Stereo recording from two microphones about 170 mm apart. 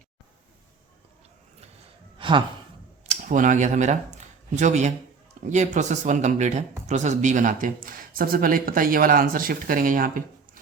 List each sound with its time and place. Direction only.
2.1 s sigh: 30° right (ahead or behind)
3.1 s speech: 50° right (ahead or behind)